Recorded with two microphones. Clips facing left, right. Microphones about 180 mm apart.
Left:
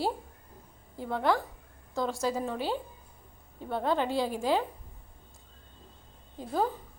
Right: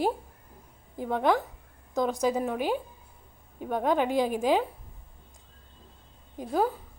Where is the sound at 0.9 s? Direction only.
15° right (ahead or behind).